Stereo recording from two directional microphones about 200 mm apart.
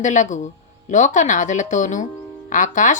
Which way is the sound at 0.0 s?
40° left (ahead or behind).